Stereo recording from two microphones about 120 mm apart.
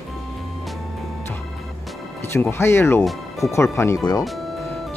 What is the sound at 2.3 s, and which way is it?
Speech, 20° left (ahead or behind).